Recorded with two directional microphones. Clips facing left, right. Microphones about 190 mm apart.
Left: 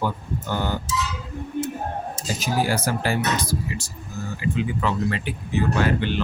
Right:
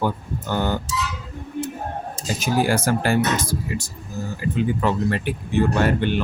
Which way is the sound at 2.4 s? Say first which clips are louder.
Right 3 dB; 50° right (ahead or behind).